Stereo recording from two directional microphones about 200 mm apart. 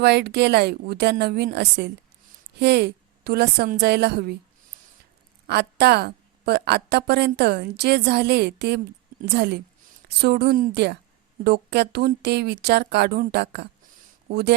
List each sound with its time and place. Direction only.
0.0 s a woman's voice: 55° right (ahead or behind)
5.5 s a woman's voice: 55° right (ahead or behind)